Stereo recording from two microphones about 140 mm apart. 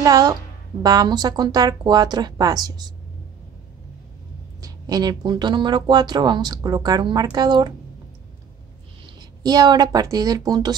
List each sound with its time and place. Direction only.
0.0 s speech: 25° right (ahead or behind)
4.6 s speech: 25° right (ahead or behind)
9.0 s a woman's voice: 30° right (ahead or behind)